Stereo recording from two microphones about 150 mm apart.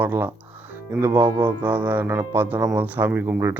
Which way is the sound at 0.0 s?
15° right (ahead or behind).